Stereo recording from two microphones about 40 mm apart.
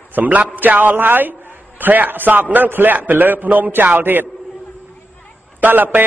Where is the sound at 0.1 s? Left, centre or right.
Right.